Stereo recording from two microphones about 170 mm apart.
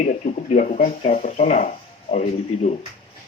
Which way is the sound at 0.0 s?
45° left (ahead or behind).